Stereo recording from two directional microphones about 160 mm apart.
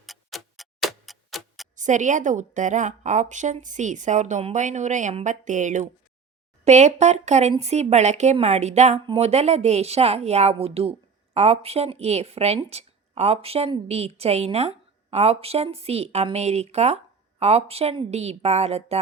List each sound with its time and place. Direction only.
0.0 s tick-tock: centre (ahead or behind)
1.7 s a woman's voice: 50° right (ahead or behind)